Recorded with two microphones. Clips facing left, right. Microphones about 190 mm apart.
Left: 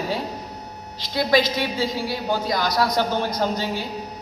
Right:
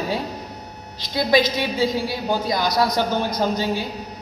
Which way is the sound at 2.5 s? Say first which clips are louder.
Right 1 dB; 15° right (ahead or behind).